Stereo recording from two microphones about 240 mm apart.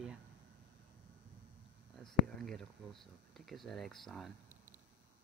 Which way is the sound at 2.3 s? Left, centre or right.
Centre.